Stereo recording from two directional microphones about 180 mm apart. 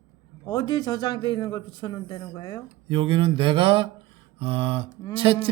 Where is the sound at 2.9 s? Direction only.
30° right (ahead or behind).